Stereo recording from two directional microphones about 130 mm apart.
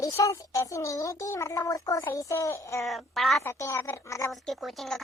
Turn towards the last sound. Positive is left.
turn(degrees=0)  # may be behind; listen again after turning